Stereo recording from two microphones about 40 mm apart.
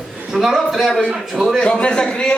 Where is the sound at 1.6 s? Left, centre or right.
Left.